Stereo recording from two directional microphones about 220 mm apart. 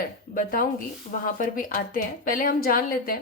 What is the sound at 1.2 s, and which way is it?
A woman's voice, 40° left (ahead or behind).